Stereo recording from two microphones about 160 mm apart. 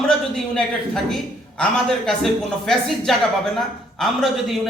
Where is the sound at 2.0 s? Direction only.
Centre (ahead or behind).